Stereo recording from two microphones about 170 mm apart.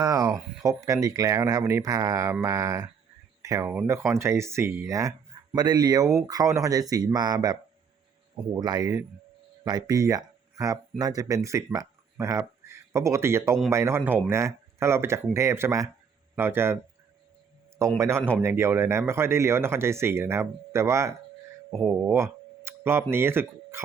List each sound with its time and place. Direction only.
0.0 s speech: 20° right (ahead or behind)
17.7 s a man's voice: 15° right (ahead or behind)